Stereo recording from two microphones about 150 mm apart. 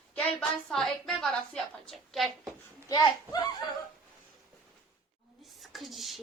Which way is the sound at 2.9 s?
25° left (ahead or behind).